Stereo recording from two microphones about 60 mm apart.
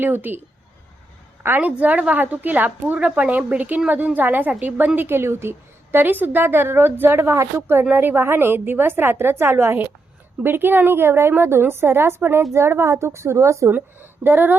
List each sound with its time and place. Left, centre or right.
0.0 s a woman's voice: right
1.5 s a woman's voice: right
4.9 s a woman's voice: right
13.7 s a woman's voice: right